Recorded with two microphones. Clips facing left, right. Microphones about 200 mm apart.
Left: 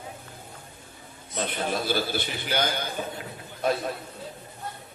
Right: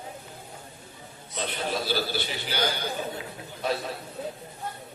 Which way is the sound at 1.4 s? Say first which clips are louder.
Left 2 dB; 50° left (ahead or behind).